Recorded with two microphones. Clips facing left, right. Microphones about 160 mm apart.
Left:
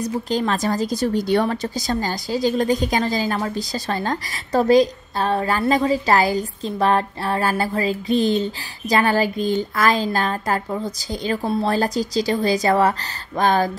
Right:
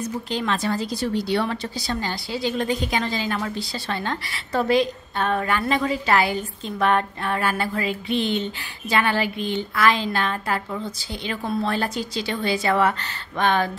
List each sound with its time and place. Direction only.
0.0 s a woman's voice: 40° left (ahead or behind)